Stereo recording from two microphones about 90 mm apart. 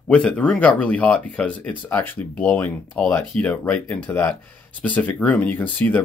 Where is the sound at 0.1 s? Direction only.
10° left (ahead or behind).